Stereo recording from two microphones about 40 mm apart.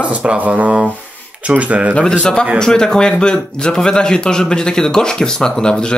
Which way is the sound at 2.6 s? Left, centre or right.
Centre.